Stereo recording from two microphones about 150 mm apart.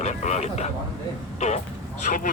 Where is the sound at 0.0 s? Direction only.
50° left (ahead or behind).